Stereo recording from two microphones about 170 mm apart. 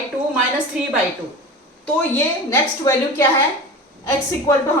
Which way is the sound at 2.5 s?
15° left (ahead or behind).